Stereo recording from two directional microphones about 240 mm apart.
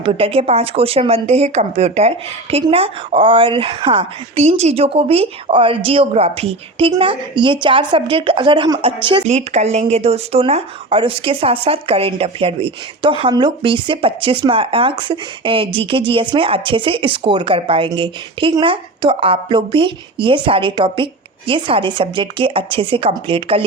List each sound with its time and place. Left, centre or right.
0.0 s speech: right